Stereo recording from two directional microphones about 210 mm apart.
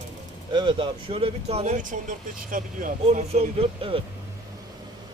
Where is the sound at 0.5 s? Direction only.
20° right (ahead or behind).